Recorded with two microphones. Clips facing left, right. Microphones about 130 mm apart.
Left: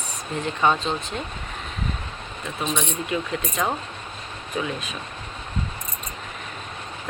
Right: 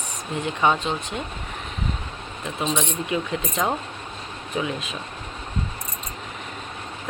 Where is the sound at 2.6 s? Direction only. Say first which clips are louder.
Right 2 dB; 25° right (ahead or behind).